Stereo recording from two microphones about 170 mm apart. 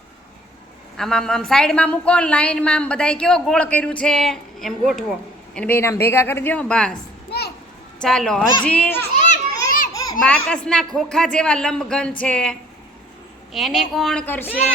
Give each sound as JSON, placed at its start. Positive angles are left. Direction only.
{"t": 0.9, "sound": "a woman's voice", "side_deg": 5}
{"t": 5.5, "sound": "a woman's voice", "side_deg": 10}
{"t": 7.3, "sound": "children playing", "side_deg": 70}
{"t": 7.9, "sound": "a woman's voice", "side_deg": 5}
{"t": 9.1, "sound": "children playing", "side_deg": 45}
{"t": 9.9, "sound": "a sound", "side_deg": 20}
{"t": 10.2, "sound": "a woman's voice", "side_deg": 5}